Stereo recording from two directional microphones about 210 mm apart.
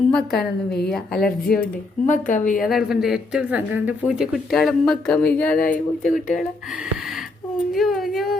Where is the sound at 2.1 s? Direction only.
35° left (ahead or behind).